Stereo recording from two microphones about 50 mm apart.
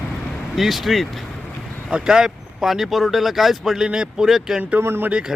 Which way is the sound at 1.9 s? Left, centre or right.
Centre.